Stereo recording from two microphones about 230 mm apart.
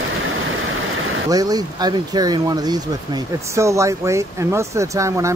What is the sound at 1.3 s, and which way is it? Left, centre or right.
Speech, centre.